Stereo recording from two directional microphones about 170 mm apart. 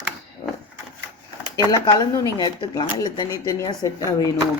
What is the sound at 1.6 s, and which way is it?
Speech, 20° left (ahead or behind).